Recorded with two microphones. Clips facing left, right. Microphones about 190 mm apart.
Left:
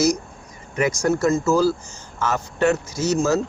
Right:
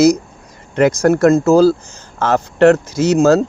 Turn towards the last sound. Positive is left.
turn(degrees=-65)  # may be behind; listen again after turning